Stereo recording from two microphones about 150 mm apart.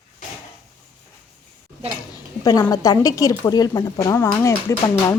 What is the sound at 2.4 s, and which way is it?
Speech, 25° left (ahead or behind).